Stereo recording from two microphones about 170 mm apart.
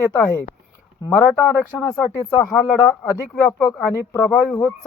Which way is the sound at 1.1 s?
10° left (ahead or behind).